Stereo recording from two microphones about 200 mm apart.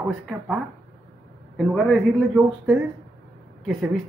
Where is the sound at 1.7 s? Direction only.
Centre (ahead or behind).